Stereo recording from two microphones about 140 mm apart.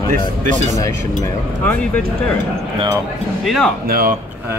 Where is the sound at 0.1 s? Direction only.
65° right (ahead or behind).